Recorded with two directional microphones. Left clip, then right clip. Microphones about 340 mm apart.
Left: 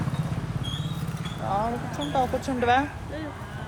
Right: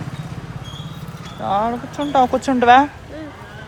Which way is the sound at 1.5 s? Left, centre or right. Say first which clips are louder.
Right 8 dB; right.